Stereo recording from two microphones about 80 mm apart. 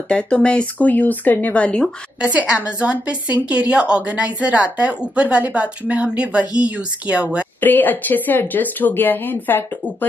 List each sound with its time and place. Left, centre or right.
0.1 s speech: centre
2.2 s a woman's voice: centre
7.6 s speech: left